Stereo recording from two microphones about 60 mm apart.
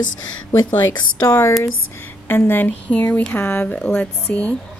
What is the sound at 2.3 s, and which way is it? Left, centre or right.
A woman's voice, left.